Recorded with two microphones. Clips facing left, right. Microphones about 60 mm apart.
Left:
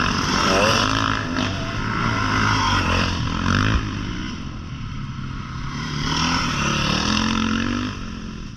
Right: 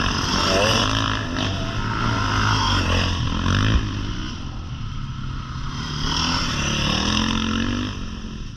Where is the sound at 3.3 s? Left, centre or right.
Left.